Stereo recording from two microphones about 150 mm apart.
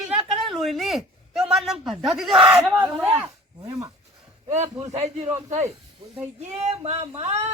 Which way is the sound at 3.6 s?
25° right (ahead or behind).